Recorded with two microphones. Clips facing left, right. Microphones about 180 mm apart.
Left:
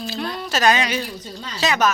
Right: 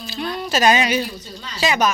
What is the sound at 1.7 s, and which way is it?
Speech, centre (ahead or behind).